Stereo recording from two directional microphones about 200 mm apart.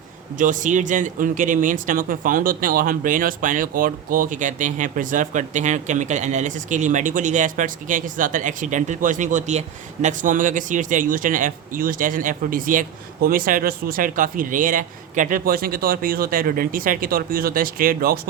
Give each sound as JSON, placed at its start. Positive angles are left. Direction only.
{"t": 0.3, "sound": "speech", "side_deg": -40}